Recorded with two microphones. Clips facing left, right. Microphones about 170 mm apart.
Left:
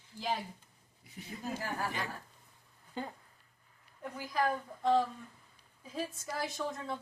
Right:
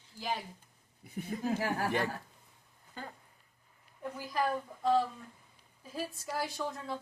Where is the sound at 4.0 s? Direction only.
Centre (ahead or behind).